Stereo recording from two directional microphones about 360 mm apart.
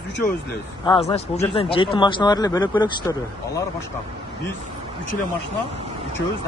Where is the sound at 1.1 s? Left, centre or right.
Centre.